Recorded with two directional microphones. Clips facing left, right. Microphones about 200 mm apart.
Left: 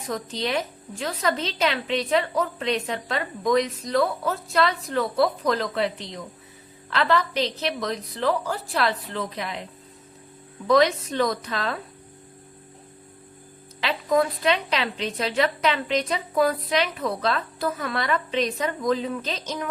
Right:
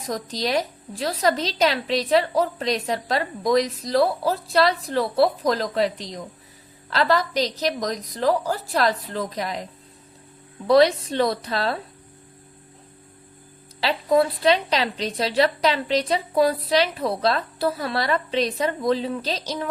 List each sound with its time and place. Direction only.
0.1 s a woman's voice: 35° right (ahead or behind)
10.7 s a woman's voice: 35° right (ahead or behind)
13.8 s a woman's voice: 30° right (ahead or behind)